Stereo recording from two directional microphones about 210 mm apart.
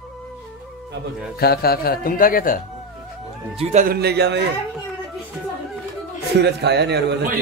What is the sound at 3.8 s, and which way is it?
Speech, 50° right (ahead or behind).